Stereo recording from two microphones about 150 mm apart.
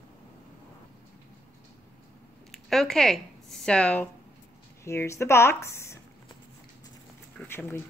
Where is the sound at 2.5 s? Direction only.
Centre (ahead or behind); by 6.0 s 20° left (ahead or behind).